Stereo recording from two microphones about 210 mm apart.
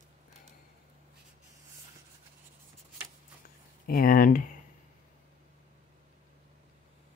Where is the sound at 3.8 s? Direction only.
45° left (ahead or behind).